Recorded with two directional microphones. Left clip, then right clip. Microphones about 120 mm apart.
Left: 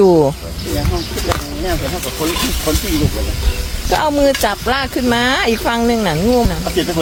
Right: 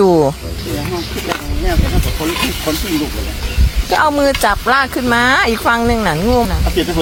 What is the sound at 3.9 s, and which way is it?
Speech, 35° left (ahead or behind).